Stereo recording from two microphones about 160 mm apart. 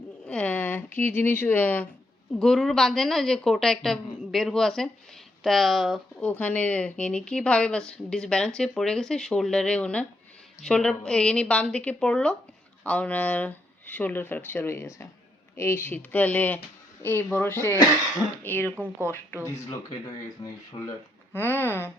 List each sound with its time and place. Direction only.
0.3 s speech: 10° left (ahead or behind)
20.7 s speech: 35° left (ahead or behind)
21.3 s speech: 15° left (ahead or behind)